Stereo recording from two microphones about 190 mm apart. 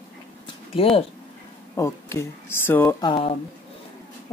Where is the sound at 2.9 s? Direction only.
25° left (ahead or behind).